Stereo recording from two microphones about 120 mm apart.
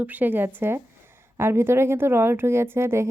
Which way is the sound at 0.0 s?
15° right (ahead or behind).